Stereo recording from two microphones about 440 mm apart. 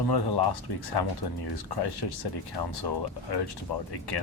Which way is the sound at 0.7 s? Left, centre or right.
Left.